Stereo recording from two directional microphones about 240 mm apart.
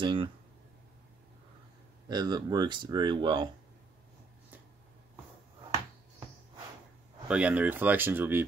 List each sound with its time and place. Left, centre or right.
0.0 s speech: right
2.0 s speech: centre
7.2 s speech: centre